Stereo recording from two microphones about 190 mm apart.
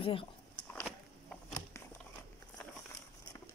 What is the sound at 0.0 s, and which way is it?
Speech, 25° left (ahead or behind).